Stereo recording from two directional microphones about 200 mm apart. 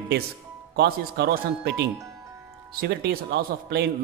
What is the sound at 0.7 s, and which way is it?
Speech, 55° right (ahead or behind).